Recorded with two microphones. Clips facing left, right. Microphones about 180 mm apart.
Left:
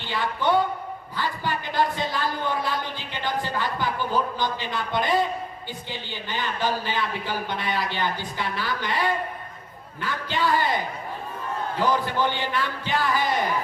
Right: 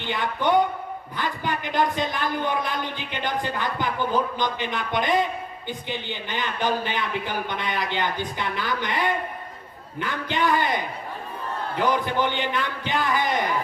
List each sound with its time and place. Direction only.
0.0 s a man's voice: 20° right (ahead or behind)